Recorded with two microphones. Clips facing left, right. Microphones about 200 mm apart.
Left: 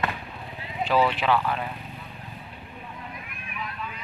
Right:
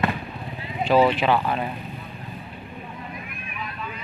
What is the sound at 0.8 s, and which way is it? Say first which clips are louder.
Speech: right 4 dB; 20° right (ahead or behind).